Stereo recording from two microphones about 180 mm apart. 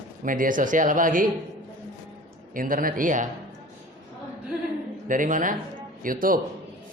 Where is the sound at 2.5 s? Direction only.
50° right (ahead or behind).